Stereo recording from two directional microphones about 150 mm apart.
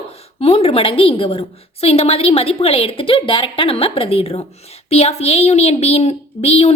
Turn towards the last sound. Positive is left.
turn(degrees=45)  # may be behind; listen again after turning